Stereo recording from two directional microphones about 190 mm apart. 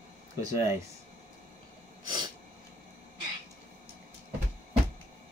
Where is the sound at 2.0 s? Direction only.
25° right (ahead or behind).